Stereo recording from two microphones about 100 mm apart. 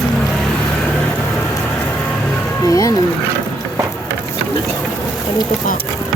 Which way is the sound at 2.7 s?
35° left (ahead or behind).